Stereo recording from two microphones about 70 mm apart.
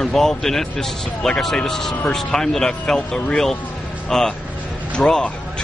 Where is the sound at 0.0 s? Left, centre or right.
Centre.